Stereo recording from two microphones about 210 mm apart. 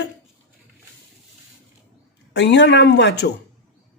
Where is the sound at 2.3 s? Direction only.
55° left (ahead or behind).